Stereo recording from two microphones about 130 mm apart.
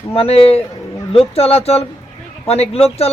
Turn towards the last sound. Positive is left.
turn(degrees=50)  # may be behind; listen again after turning